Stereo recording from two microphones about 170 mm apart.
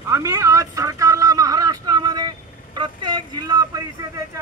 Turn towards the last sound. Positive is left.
turn(degrees=-20)  # may be behind; listen again after turning